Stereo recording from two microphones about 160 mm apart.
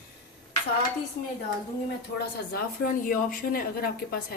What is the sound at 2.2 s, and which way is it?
Speech, 65° left (ahead or behind).